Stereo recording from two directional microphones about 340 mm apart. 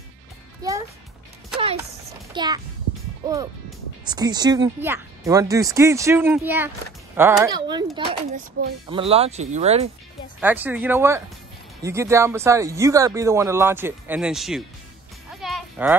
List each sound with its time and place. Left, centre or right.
0.6 s music: centre
1.6 s a sound: centre
4.0 s speech: centre
10.4 s speech: centre
15.4 s music: centre